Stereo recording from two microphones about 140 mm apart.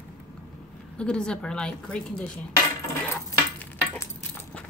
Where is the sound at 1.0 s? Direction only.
5° left (ahead or behind).